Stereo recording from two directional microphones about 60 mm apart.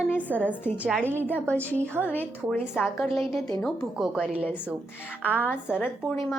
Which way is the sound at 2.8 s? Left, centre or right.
Centre.